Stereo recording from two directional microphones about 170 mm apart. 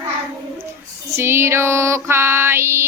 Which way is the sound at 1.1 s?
15° right (ahead or behind).